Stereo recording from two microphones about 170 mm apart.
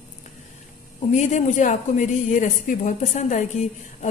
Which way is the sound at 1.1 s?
45° left (ahead or behind).